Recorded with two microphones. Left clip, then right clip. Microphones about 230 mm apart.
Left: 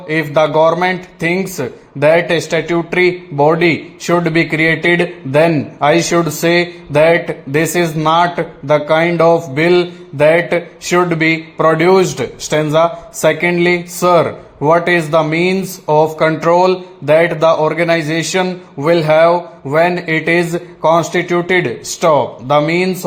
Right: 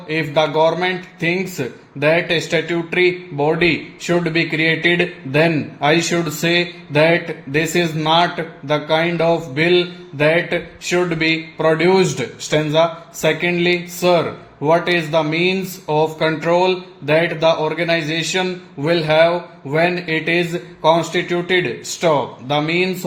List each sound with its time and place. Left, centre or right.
0.1 s speech: left